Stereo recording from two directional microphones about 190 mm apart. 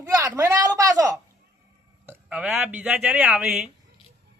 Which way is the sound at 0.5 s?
20° right (ahead or behind).